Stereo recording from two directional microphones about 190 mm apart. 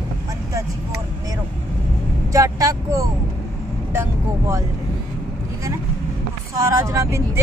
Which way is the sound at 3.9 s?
15° right (ahead or behind).